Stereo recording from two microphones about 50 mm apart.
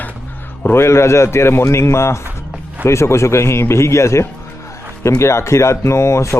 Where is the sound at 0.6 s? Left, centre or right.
Left.